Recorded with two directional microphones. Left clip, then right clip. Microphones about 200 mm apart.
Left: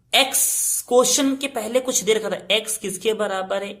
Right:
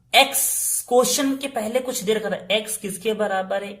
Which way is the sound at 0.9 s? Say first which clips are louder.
Left 1 dB; 20° left (ahead or behind).